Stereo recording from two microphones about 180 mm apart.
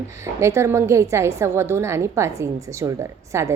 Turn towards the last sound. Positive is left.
turn(degrees=-15)  # may be behind; listen again after turning